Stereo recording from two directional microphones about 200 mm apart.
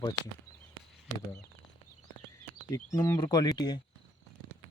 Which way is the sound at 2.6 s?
15° left (ahead or behind).